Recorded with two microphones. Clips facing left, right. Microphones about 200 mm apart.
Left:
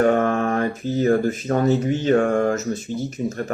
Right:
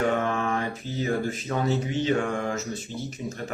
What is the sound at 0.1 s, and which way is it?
A man's voice, 50° left (ahead or behind).